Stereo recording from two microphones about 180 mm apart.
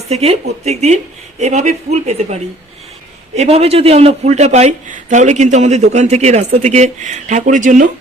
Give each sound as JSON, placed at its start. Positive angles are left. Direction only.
{"t": 0.1, "sound": "speech", "side_deg": -35}